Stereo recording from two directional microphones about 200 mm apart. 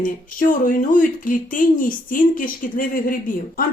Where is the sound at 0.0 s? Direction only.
45° left (ahead or behind).